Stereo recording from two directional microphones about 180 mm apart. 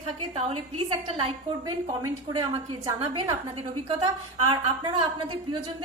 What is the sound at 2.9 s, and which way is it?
Speech, 25° right (ahead or behind).